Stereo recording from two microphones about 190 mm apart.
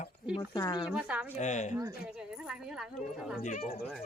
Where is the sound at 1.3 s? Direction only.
40° left (ahead or behind).